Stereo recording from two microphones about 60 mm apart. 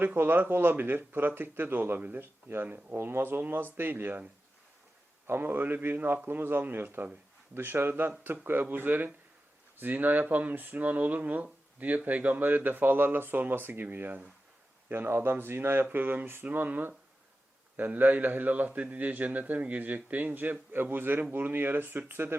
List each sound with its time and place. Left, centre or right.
0.0 s speech: right
5.2 s a man's voice: right